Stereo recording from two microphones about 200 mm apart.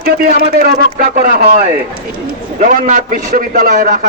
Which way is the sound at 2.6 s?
40° right (ahead or behind).